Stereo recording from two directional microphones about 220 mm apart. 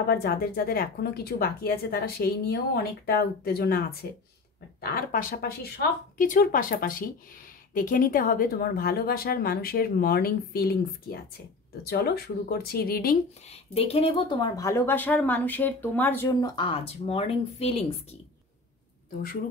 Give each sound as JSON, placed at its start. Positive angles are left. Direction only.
{"t": 0.1, "sound": "speech", "side_deg": 45}
{"t": 13.7, "sound": "speech", "side_deg": 25}